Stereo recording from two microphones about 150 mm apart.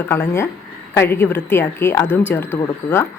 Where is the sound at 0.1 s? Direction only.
15° left (ahead or behind).